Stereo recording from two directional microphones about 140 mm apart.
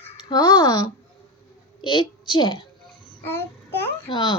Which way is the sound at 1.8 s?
35° left (ahead or behind).